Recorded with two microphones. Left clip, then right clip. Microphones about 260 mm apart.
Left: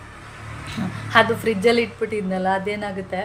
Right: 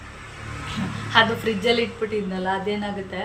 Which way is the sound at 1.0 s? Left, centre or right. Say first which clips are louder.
Left 2 dB; centre.